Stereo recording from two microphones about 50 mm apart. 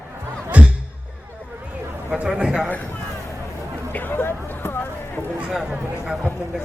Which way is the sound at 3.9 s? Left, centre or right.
Left.